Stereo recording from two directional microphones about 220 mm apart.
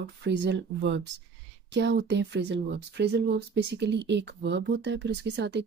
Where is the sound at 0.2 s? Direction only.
50° right (ahead or behind).